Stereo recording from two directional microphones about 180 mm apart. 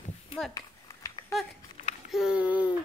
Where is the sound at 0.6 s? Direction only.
20° left (ahead or behind).